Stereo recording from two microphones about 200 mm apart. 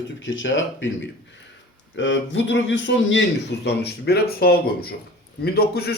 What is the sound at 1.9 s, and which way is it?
Speech, 65° left (ahead or behind).